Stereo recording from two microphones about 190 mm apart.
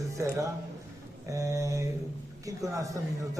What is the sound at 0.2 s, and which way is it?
A man's voice, 15° right (ahead or behind).